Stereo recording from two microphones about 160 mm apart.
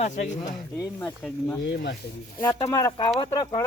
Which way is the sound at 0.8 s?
15° left (ahead or behind).